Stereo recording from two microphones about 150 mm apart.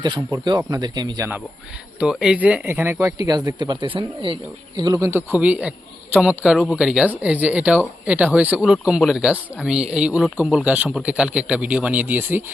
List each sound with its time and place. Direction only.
0.0 s speech: 30° right (ahead or behind)
2.0 s speech: 5° right (ahead or behind); by 4.4 s 35° right (ahead or behind)
4.8 s speech: 25° right (ahead or behind)